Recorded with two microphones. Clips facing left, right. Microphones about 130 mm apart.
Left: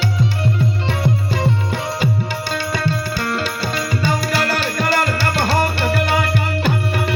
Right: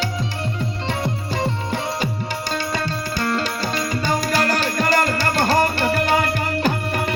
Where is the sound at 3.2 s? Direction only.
40° right (ahead or behind).